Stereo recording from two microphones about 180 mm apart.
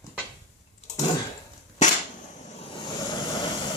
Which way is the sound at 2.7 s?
25° left (ahead or behind).